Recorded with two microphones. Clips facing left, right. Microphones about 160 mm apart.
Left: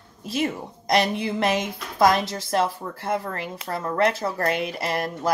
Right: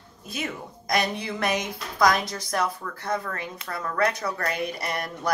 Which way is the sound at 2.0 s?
25° left (ahead or behind).